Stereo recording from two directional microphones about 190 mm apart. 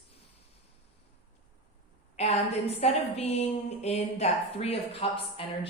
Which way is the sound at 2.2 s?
35° left (ahead or behind).